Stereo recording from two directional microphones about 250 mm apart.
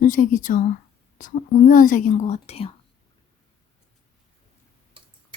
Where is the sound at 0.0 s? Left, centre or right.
Left.